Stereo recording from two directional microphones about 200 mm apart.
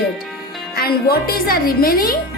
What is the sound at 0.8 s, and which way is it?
A woman's voice, 50° left (ahead or behind).